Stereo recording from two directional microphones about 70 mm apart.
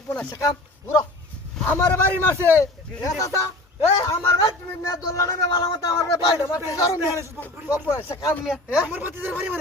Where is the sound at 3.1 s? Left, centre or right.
Left.